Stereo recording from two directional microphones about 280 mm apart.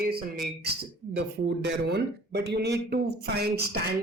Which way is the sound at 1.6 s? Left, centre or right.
Right.